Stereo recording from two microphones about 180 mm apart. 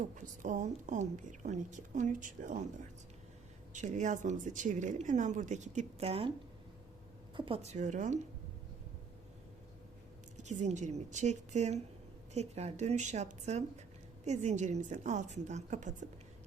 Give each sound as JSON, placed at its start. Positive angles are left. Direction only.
{"t": 0.0, "sound": "a woman's voice", "side_deg": -45}
{"t": 3.7, "sound": "a woman's voice", "side_deg": -40}
{"t": 7.3, "sound": "a woman's voice", "side_deg": -30}
{"t": 10.3, "sound": "a woman's voice", "side_deg": -40}